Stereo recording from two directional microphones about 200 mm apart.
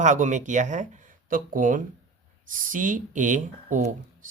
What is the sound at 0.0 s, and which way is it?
A man's voice, 40° right (ahead or behind).